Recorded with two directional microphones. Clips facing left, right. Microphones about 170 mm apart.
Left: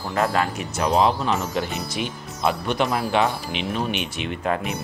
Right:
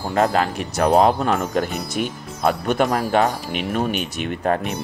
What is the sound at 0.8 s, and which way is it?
Speech, 50° right (ahead or behind).